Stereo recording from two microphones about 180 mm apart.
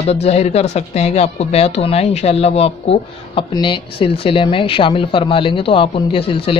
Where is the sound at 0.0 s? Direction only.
35° left (ahead or behind).